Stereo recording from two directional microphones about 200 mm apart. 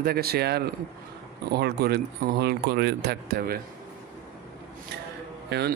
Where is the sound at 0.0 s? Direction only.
50° right (ahead or behind).